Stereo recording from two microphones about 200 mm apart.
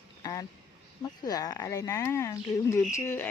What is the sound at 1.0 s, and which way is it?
Speech, 20° left (ahead or behind).